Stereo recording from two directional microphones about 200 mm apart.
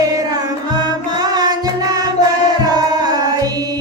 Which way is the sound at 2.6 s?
20° right (ahead or behind).